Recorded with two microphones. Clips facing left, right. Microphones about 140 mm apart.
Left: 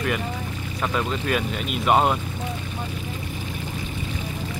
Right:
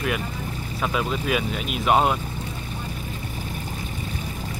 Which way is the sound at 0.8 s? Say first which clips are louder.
Even; 5° right (ahead or behind).